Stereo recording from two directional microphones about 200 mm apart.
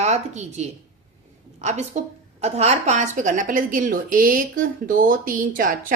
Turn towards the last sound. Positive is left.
turn(degrees=-40)  # may be behind; listen again after turning